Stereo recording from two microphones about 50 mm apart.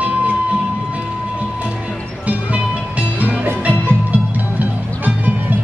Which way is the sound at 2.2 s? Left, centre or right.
Right.